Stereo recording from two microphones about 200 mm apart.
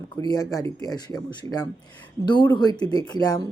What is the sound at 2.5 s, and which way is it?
Speech, 20° left (ahead or behind).